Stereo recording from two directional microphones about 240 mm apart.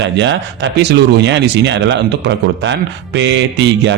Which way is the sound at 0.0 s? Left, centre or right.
Right.